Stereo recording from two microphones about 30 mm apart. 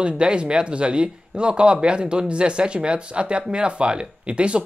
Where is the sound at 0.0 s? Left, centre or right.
Right.